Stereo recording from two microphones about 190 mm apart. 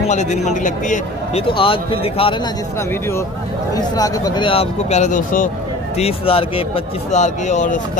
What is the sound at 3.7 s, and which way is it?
Speech, 20° left (ahead or behind).